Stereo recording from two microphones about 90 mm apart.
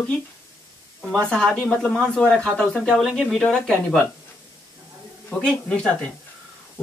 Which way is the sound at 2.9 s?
Centre (ahead or behind).